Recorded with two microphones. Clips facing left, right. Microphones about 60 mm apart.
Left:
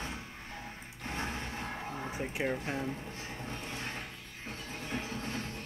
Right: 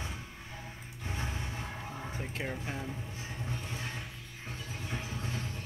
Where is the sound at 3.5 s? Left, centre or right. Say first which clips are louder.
Right 2 dB; left.